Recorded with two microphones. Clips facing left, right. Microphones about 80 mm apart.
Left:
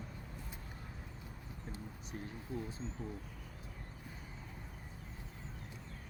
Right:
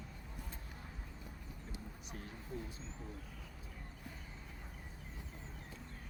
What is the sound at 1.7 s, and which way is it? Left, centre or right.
Speech, left.